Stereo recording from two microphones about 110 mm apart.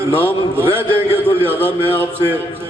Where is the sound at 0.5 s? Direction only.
20° right (ahead or behind).